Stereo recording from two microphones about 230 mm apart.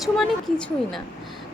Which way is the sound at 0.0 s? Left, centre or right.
Centre.